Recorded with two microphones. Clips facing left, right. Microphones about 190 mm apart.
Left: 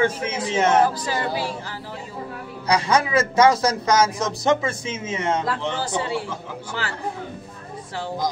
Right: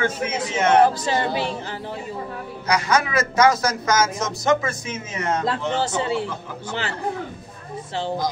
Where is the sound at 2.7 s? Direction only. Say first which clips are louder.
Left 1 dB; 30° left (ahead or behind).